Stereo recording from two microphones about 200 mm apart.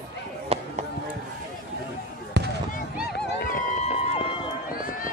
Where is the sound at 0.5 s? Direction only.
30° right (ahead or behind).